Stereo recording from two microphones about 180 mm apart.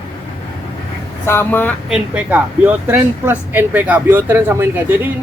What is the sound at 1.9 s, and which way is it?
Speech, 5° right (ahead or behind).